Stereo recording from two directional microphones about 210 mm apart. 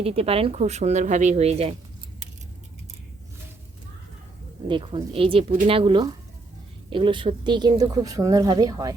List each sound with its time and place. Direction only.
0.0 s speech: 30° right (ahead or behind)
4.7 s speech: 25° right (ahead or behind)